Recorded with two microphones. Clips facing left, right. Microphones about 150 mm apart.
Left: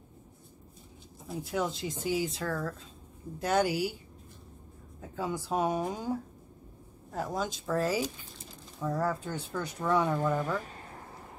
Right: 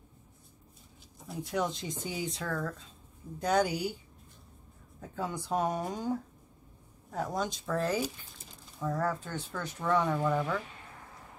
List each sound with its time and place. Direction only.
1.2 s speech: centre (ahead or behind)
5.0 s speech: 5° left (ahead or behind)
10.6 s a sound: 40° left (ahead or behind)